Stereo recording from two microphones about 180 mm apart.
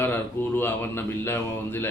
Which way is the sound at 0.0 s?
10° left (ahead or behind).